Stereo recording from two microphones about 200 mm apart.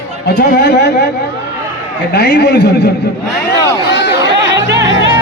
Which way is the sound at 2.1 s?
55° left (ahead or behind).